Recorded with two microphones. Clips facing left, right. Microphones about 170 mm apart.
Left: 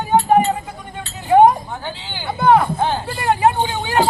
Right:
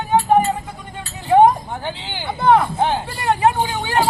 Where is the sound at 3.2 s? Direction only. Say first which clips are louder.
Left 1 dB; 20° left (ahead or behind).